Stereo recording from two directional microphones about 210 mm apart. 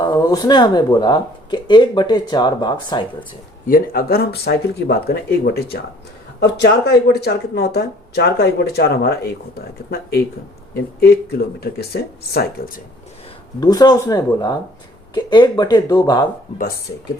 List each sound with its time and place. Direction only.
0.0 s speech: 20° left (ahead or behind)
3.7 s speech: 45° left (ahead or behind)
13.6 s speech: 20° left (ahead or behind)